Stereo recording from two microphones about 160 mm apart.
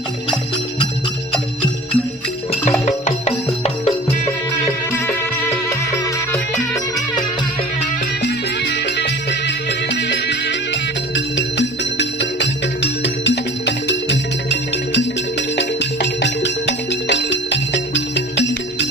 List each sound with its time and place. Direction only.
2.8 s music: 40° left (ahead or behind)
4.9 s music: 15° left (ahead or behind)
8.2 s music: 90° left